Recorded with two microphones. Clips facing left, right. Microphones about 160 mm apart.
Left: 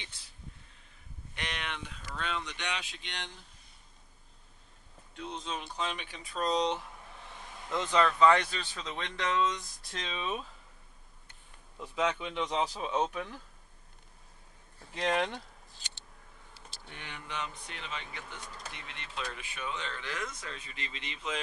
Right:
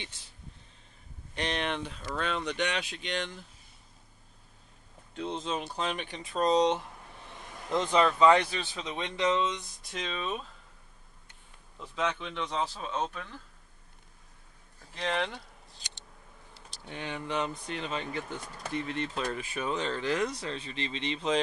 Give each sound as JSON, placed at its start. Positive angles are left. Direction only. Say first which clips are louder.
{"t": 1.3, "sound": "speech", "louder": "right 8 dB", "side_deg": -35}
{"t": 5.1, "sound": "speech", "louder": "right 6 dB", "side_deg": -30}
{"t": 7.7, "sound": "speech", "louder": "right 3 dB", "side_deg": -15}
{"t": 10.1, "sound": "speech", "louder": "even", "side_deg": 5}
{"t": 11.8, "sound": "speech", "louder": "left 1 dB", "side_deg": 10}
{"t": 15.0, "sound": "speech", "louder": "left 1 dB", "side_deg": 5}
{"t": 16.9, "sound": "speech", "louder": "right 10 dB", "side_deg": -25}
{"t": 17.3, "sound": "speech", "louder": "right 7 dB", "side_deg": -35}